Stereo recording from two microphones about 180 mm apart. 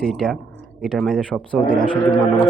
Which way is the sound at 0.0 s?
Centre (ahead or behind).